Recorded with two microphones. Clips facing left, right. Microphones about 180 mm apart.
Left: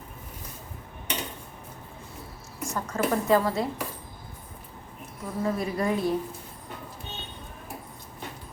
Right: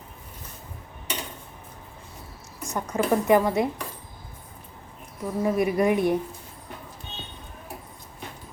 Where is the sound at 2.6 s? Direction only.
20° right (ahead or behind).